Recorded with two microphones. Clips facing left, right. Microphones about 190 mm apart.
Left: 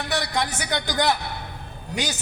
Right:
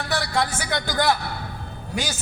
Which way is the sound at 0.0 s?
20° left (ahead or behind).